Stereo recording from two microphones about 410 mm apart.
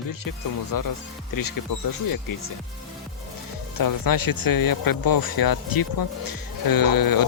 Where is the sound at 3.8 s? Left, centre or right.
Left.